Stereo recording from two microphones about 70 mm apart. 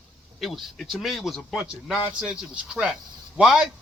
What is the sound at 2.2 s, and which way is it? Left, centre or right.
Speech, centre.